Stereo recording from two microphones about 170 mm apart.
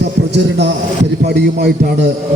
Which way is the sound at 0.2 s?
60° right (ahead or behind).